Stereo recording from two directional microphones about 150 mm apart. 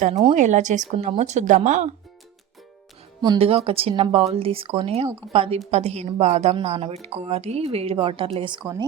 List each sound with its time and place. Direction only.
0.0 s speech: 45° right (ahead or behind)
3.3 s a woman's voice: 40° right (ahead or behind)